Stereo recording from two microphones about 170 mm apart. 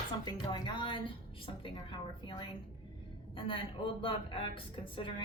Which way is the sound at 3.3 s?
30° left (ahead or behind).